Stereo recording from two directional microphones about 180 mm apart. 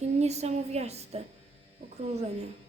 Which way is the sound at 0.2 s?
35° right (ahead or behind).